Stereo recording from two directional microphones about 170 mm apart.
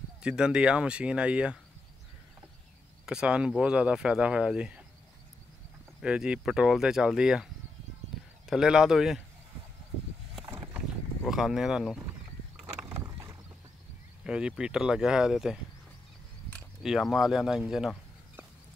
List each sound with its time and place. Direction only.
0.2 s speech: 5° right (ahead or behind)
3.1 s speech: 5° right (ahead or behind)
5.9 s speech: 5° right (ahead or behind)
8.5 s speech: 5° right (ahead or behind)
10.4 s a sound: 10° right (ahead or behind)
11.2 s speech: centre (ahead or behind)
12.8 s rowboat: 15° right (ahead or behind)
14.2 s speech: 5° right (ahead or behind)
16.8 s speech: centre (ahead or behind)